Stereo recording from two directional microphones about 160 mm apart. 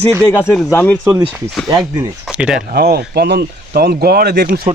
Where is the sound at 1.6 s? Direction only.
20° right (ahead or behind).